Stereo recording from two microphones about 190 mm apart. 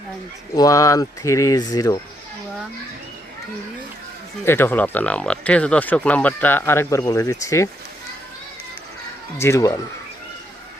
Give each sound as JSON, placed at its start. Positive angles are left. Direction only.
{"t": 0.5, "sound": "speech", "side_deg": 20}
{"t": 4.4, "sound": "speech", "side_deg": 10}
{"t": 9.4, "sound": "speech", "side_deg": 15}